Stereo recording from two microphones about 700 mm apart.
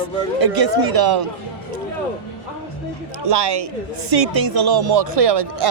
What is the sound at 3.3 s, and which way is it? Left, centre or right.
Speech, right.